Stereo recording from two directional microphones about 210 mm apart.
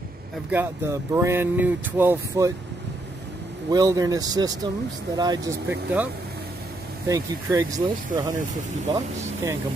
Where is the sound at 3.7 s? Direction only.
15° right (ahead or behind).